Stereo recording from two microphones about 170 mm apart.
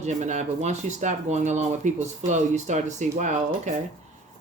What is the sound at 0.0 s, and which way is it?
Speech, 45° right (ahead or behind).